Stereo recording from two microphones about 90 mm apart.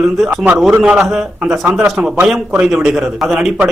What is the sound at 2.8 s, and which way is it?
Speech, 5° right (ahead or behind).